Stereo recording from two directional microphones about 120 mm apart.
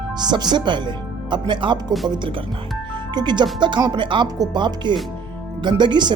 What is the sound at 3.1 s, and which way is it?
Speech, 40° right (ahead or behind).